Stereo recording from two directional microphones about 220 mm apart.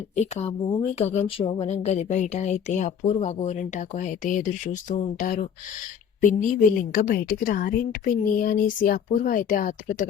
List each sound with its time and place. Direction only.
0.2 s speech: 30° left (ahead or behind)